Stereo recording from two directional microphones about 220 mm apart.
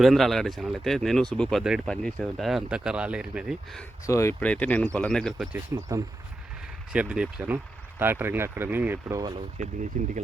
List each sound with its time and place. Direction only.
0.0 s speech: centre (ahead or behind)
4.0 s speech: 15° left (ahead or behind)
5.7 s speech: 10° right (ahead or behind)
6.9 s speech: 5° right (ahead or behind)
10.0 s speech: 35° right (ahead or behind)